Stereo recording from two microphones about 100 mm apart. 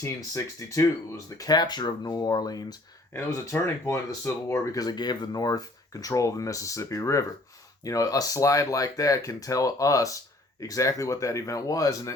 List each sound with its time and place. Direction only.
0.0 s speech: 35° left (ahead or behind)
3.1 s speech: 25° left (ahead or behind)